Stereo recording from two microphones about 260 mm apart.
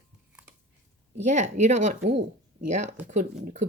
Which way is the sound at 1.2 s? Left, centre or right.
Right.